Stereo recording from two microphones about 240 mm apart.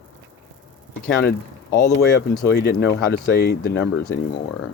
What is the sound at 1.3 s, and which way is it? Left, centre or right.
Speech, left.